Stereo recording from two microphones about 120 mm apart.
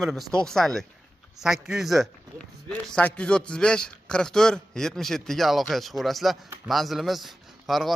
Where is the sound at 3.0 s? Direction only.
10° left (ahead or behind).